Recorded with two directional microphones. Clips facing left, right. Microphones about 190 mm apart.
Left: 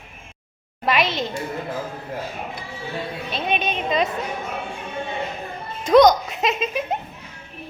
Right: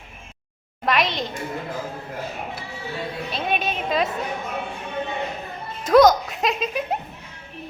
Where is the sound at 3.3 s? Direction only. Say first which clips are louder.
Left 1 dB; centre (ahead or behind).